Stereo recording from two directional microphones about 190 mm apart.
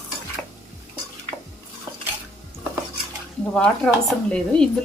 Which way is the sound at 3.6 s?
5° left (ahead or behind).